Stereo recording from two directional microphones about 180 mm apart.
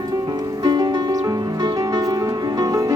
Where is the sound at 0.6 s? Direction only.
25° right (ahead or behind).